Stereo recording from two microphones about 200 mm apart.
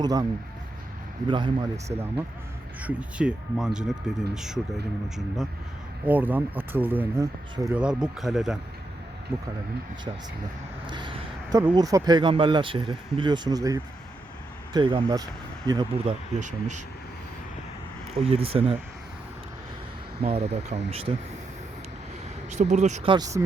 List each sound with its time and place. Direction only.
0.0 s speech: 20° right (ahead or behind)
1.3 s speech: 25° right (ahead or behind)
2.8 s speech: 5° right (ahead or behind)
10.8 s speech: 25° right (ahead or behind)
16.4 s speech: 35° right (ahead or behind)
18.2 s speech: 30° right (ahead or behind)
20.2 s speech: 30° right (ahead or behind)
22.4 s speech: 35° right (ahead or behind)
23.1 s speech: 20° right (ahead or behind)